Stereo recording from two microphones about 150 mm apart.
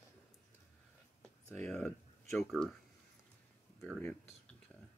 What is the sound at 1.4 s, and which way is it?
Speech, 10° left (ahead or behind).